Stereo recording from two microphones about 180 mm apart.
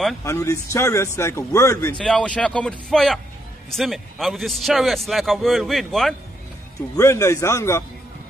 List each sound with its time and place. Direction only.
0.2 s a man's voice: 15° left (ahead or behind); by 6.1 s centre (ahead or behind)
7.0 s a man's voice: 15° left (ahead or behind)